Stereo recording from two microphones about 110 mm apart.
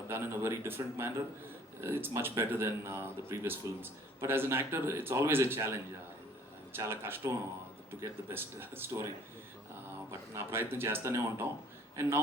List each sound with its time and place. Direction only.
0.1 s speech: 20° right (ahead or behind)
6.7 s speech: 20° right (ahead or behind)
10.1 s speech: 20° right (ahead or behind)